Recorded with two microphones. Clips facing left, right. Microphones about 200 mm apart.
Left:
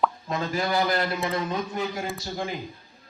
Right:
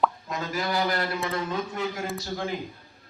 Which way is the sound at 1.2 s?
15° left (ahead or behind).